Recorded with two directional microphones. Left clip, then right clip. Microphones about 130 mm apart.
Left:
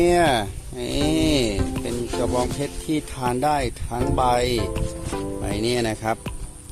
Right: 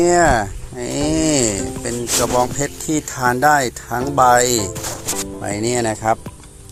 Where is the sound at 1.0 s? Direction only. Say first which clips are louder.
Right 3 dB; 25° left (ahead or behind).